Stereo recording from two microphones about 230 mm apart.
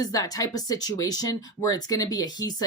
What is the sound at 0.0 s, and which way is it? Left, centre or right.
Speech, centre.